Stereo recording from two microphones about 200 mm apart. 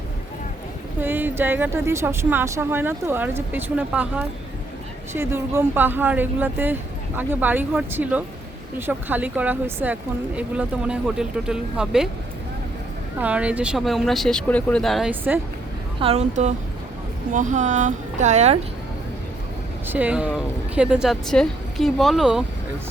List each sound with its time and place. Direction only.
1.0 s speech: 10° right (ahead or behind)
13.1 s speech: 5° right (ahead or behind)
16.0 s a woman's voice: 30° right (ahead or behind)
19.9 s speech: 5° right (ahead or behind)